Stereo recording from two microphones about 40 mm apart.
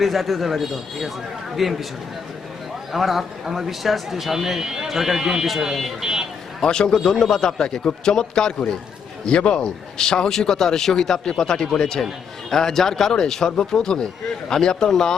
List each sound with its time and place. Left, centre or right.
0.0 s speech: centre
2.9 s speech: centre
6.6 s a man's voice: centre